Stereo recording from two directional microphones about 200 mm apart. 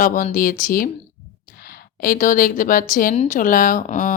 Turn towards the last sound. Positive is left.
turn(degrees=40)  # may be behind; listen again after turning